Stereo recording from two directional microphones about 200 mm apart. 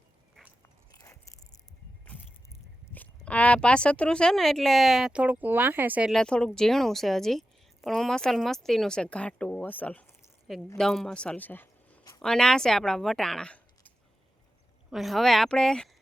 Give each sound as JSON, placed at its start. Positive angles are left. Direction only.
{"t": 0.9, "sound": "biting", "side_deg": 15}
{"t": 2.0, "sound": "speech", "side_deg": 10}